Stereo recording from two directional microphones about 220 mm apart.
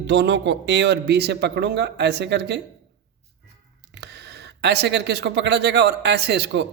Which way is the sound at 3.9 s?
50° right (ahead or behind).